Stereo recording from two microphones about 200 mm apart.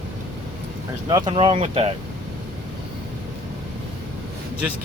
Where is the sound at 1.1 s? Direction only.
25° right (ahead or behind).